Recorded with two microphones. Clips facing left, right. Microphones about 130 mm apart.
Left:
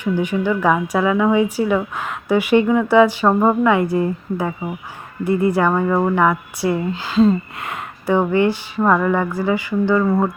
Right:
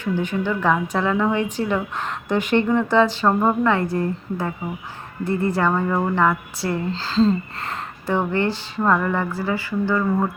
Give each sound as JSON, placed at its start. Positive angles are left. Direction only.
{"t": 0.0, "sound": "a woman's voice", "side_deg": 15}
{"t": 10.1, "sound": "speech", "side_deg": 35}